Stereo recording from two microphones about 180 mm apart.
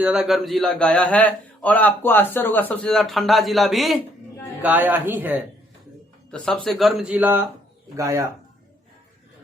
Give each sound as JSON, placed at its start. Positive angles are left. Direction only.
{"t": 0.0, "sound": "a man's voice", "side_deg": -5}
{"t": 6.3, "sound": "a man's voice", "side_deg": 5}